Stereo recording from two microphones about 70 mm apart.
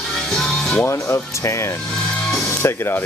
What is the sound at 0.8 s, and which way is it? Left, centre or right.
Speech, left.